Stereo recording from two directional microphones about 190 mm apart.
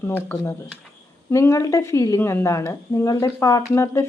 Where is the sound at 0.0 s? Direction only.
10° left (ahead or behind).